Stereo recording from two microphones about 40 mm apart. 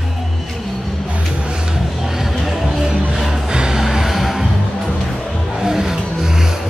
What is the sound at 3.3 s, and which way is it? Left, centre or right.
Music, centre.